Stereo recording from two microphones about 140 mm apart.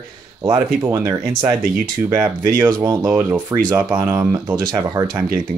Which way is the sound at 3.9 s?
20° right (ahead or behind).